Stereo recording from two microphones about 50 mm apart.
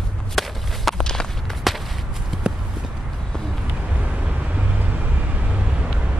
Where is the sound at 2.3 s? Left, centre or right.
Centre.